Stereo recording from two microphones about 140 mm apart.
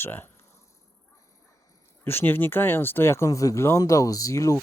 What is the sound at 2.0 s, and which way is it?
Speech, 15° left (ahead or behind).